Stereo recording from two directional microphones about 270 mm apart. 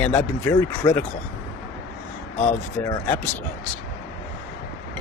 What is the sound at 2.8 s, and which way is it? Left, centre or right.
Speech, centre.